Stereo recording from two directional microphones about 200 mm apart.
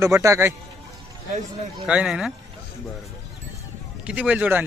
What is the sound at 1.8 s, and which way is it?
Speech, 5° right (ahead or behind).